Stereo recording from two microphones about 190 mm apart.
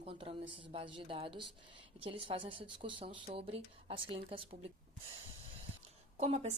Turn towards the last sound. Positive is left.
turn(degrees=-35)  # may be behind; listen again after turning